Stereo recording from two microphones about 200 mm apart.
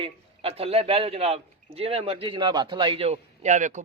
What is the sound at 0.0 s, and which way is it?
A man's voice, 30° right (ahead or behind).